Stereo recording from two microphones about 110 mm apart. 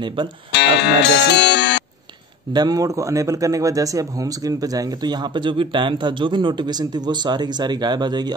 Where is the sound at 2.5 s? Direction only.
35° right (ahead or behind).